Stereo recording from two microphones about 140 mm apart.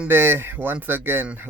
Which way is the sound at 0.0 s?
15° right (ahead or behind).